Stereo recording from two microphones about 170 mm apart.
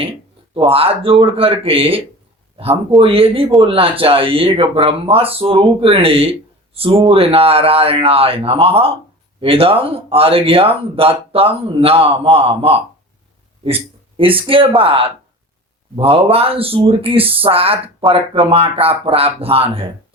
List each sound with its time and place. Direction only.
0.5 s speech: 30° right (ahead or behind)